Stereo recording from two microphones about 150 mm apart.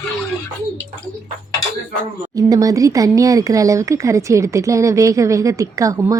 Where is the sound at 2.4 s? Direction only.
25° right (ahead or behind).